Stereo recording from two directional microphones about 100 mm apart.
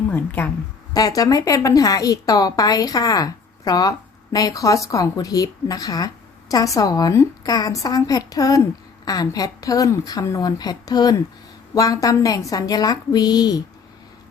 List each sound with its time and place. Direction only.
0.1 s a woman's voice: 15° left (ahead or behind)
0.9 s a woman's voice: 40° left (ahead or behind)